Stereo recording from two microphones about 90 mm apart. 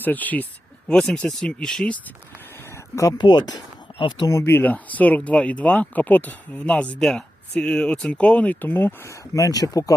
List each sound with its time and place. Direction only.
0.0 s speech: 20° left (ahead or behind)
2.6 s a sound: 35° left (ahead or behind)
3.2 s speech: 55° left (ahead or behind)
3.9 s speech: 70° left (ahead or behind)
4.3 s speech: 30° left (ahead or behind)
9.3 s speech: 40° left (ahead or behind)